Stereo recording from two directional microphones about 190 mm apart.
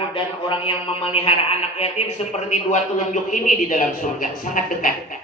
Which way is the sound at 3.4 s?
45° left (ahead or behind).